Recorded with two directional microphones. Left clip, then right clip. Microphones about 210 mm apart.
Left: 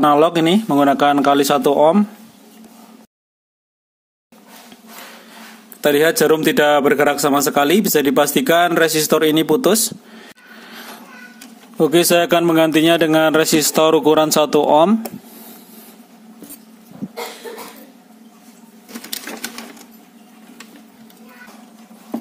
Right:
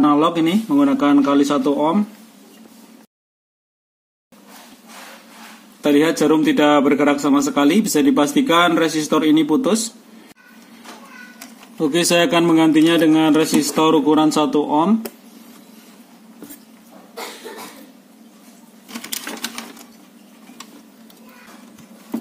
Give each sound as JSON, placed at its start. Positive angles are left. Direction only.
{"t": 0.0, "sound": "a man's voice", "side_deg": 50}
{"t": 5.8, "sound": "a man's voice", "side_deg": 50}
{"t": 11.8, "sound": "a man's voice", "side_deg": 40}